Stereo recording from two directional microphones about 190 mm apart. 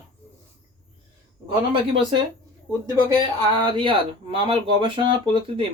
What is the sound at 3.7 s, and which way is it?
Speech, 25° right (ahead or behind).